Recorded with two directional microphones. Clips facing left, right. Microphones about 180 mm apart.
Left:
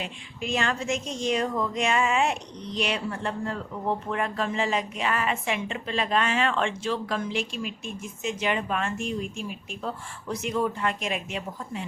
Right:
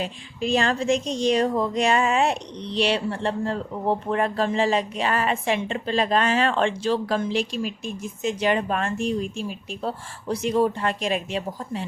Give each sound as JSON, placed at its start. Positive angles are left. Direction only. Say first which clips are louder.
{"t": 0.0, "sound": "speech", "louder": "right 6 dB", "side_deg": -35}